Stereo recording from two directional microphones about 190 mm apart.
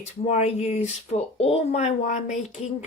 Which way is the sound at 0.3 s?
35° left (ahead or behind).